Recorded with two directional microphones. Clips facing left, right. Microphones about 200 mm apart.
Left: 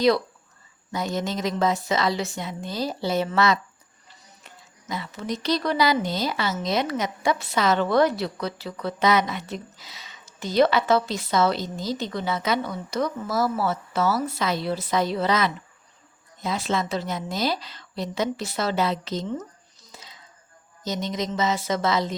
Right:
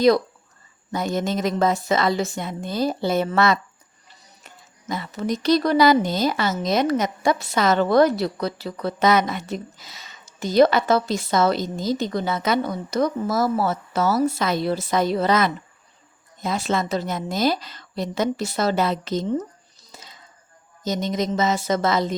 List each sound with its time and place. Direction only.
0.9 s a woman's voice: 55° right (ahead or behind)
19.9 s a sound: 45° right (ahead or behind)
20.8 s a woman's voice: 45° right (ahead or behind)